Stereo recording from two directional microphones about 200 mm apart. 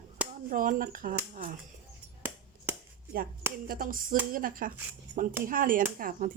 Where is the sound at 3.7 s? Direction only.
45° right (ahead or behind).